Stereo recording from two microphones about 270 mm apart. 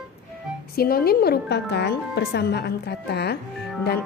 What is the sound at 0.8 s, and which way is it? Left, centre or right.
Speech, left.